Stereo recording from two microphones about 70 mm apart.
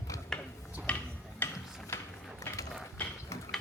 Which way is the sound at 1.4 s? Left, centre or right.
Left.